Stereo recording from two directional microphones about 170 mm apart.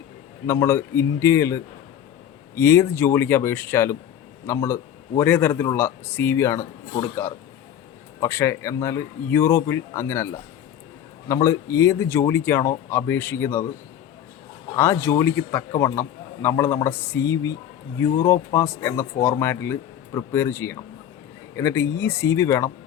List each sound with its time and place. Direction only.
0.4 s a man's voice: 15° left (ahead or behind)
14.8 s a man's voice: 15° left (ahead or behind)